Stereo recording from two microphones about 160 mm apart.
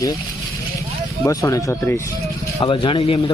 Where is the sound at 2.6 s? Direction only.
30° left (ahead or behind).